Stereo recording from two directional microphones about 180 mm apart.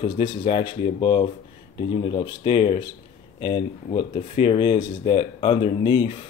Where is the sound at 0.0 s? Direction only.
30° left (ahead or behind).